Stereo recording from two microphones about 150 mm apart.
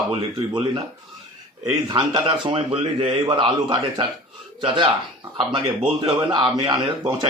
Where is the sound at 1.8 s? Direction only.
30° right (ahead or behind).